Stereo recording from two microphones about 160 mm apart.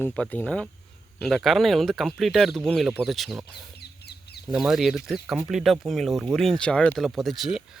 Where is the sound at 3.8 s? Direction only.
90° left.